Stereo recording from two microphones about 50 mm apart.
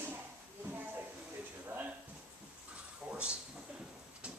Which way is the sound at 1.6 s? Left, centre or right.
Right.